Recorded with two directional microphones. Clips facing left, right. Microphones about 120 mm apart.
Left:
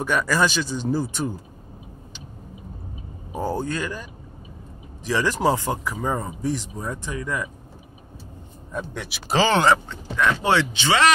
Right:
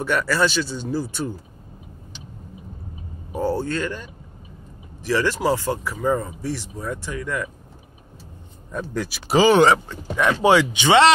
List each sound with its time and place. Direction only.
0.0 s speech: 15° left (ahead or behind)
3.3 s speech: 15° left (ahead or behind)
8.7 s speech: centre (ahead or behind)
9.4 s speech: 10° right (ahead or behind)